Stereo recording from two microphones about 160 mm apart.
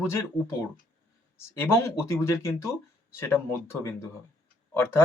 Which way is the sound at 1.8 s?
15° left (ahead or behind).